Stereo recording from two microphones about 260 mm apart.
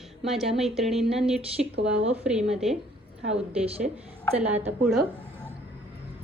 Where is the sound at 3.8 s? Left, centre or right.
Centre.